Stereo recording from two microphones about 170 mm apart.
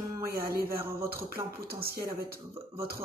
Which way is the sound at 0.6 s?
60° right (ahead or behind).